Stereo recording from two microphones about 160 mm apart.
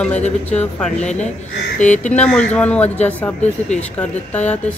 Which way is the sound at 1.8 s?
50° left (ahead or behind).